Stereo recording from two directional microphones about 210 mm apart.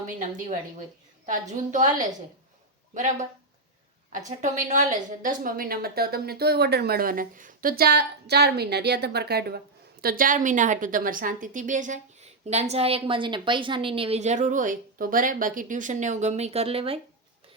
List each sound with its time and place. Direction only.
0.2 s a woman's voice: 35° right (ahead or behind)
2.9 s a woman's voice: 35° right (ahead or behind)
4.3 s a woman's voice: 35° right (ahead or behind)